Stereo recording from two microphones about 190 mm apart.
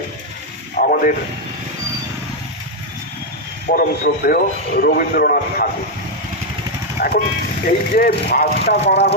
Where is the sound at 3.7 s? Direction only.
50° left (ahead or behind).